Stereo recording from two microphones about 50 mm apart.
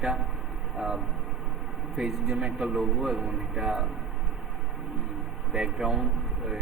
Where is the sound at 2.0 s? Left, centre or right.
Centre.